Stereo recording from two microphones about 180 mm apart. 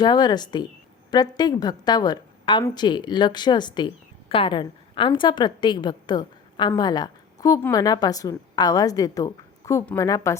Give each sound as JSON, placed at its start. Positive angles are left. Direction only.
{"t": 0.0, "sound": "a woman's voice", "side_deg": 25}